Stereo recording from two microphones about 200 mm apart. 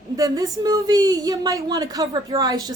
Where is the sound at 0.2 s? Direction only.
20° right (ahead or behind).